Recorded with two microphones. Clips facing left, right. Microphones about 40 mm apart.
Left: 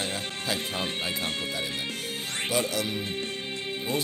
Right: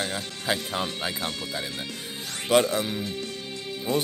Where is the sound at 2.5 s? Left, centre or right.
Right.